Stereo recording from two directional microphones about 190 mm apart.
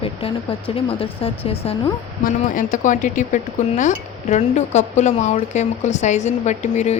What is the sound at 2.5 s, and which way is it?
Speech, 45° left (ahead or behind).